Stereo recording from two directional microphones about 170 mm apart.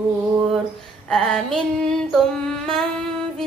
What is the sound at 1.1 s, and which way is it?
Child singing, 5° left (ahead or behind).